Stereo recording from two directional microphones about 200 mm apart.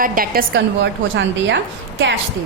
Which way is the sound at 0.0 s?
45° right (ahead or behind).